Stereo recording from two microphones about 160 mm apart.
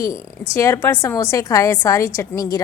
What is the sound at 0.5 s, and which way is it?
A woman's voice, 15° left (ahead or behind).